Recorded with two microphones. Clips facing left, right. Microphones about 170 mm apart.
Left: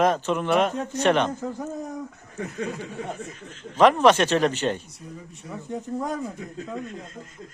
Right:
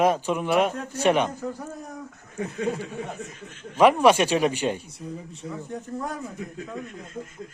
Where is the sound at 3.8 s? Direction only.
10° right (ahead or behind).